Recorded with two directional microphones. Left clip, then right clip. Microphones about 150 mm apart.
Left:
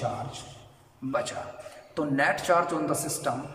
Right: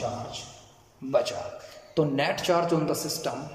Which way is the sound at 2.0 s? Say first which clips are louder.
Even; 15° right (ahead or behind).